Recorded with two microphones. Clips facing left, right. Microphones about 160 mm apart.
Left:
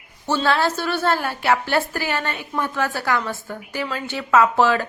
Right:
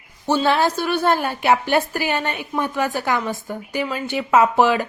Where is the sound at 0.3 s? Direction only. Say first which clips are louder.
Right 2 dB; 15° right (ahead or behind).